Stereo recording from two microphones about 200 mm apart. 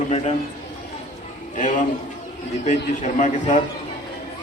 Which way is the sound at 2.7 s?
35° left (ahead or behind).